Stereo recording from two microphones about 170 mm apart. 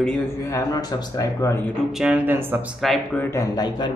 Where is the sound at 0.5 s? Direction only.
20° left (ahead or behind).